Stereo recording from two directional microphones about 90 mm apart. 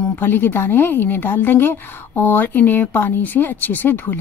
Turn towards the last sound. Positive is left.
turn(degrees=20)  # may be behind; listen again after turning